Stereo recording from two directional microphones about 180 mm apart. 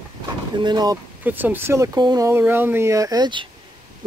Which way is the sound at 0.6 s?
20° right (ahead or behind).